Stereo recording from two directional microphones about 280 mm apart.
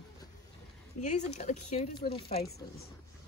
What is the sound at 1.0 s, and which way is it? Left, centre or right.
Speech, left.